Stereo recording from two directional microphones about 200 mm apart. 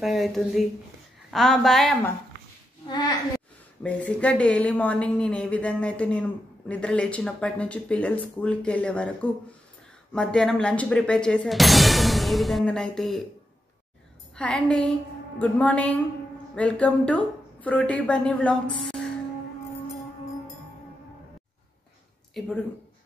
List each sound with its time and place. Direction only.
0.0 s speech: centre (ahead or behind)
2.9 s speech: 20° left (ahead or behind)
3.8 s a woman's voice: 5° left (ahead or behind)
14.3 s a woman's voice: 5° left (ahead or behind)
22.3 s speech: centre (ahead or behind)